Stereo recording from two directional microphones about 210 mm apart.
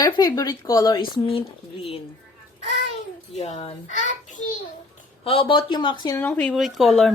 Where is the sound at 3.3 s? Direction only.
30° left (ahead or behind).